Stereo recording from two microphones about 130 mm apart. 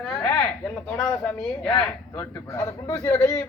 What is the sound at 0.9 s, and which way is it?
Speech, 10° left (ahead or behind).